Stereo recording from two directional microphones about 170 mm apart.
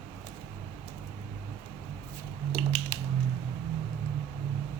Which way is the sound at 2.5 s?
30° right (ahead or behind).